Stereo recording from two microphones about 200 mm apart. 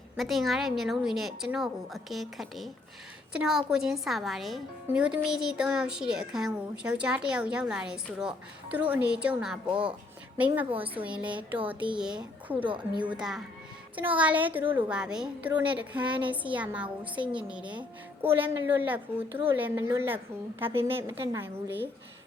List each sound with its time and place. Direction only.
0.2 s a woman's voice: centre (ahead or behind)
12.6 s a woman's voice: 25° right (ahead or behind)
13.1 s a woman's voice: 5° right (ahead or behind)